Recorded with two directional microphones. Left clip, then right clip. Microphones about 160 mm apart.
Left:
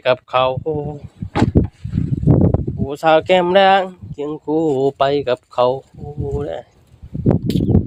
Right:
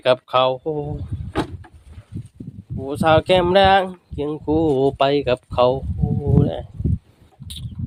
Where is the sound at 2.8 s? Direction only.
20° left (ahead or behind).